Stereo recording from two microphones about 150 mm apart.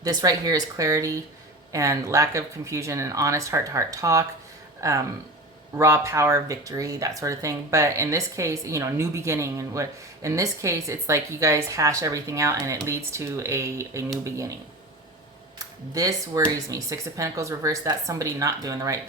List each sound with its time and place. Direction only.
0.0 s speech: 25° right (ahead or behind)
15.5 s speech: 25° right (ahead or behind)